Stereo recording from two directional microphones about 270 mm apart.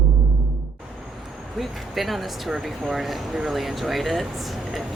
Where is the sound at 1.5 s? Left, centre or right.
Centre.